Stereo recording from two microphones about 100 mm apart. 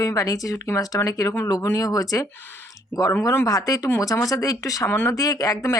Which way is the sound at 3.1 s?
25° left (ahead or behind).